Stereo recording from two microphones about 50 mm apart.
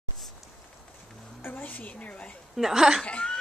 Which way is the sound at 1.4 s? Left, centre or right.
Left.